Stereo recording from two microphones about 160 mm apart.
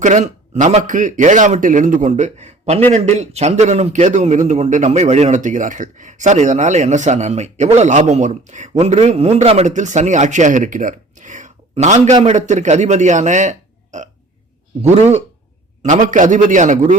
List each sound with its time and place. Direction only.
0.0 s a man's voice: 50° right (ahead or behind)